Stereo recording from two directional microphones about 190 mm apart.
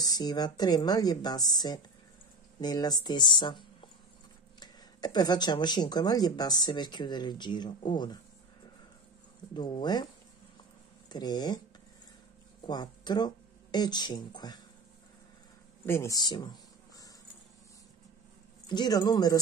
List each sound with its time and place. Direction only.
0.0 s speech: 20° left (ahead or behind)
9.5 s speech: 20° left (ahead or behind)
11.1 s speech: 20° left (ahead or behind)
12.6 s speech: 20° left (ahead or behind)
15.8 s speech: 15° left (ahead or behind)
18.7 s speech: 20° left (ahead or behind)